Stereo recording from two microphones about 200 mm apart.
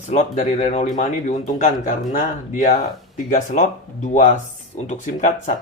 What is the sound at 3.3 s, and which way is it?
Speech, 35° left (ahead or behind).